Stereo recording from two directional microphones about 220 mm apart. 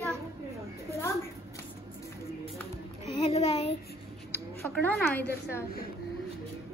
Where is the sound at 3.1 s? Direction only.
25° left (ahead or behind).